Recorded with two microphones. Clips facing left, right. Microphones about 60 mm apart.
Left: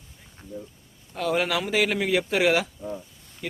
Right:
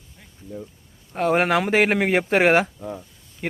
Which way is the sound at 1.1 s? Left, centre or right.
Right.